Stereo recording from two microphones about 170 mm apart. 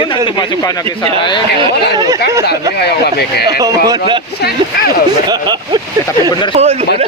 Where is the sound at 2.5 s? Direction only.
70° left (ahead or behind).